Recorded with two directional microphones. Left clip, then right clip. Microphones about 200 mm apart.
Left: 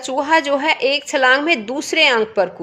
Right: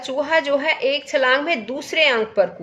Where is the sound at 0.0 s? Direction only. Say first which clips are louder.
Left 3 dB; 40° left (ahead or behind).